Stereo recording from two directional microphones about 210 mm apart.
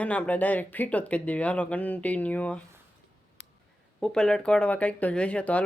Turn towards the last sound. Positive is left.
turn(degrees=5)  # may be behind; listen again after turning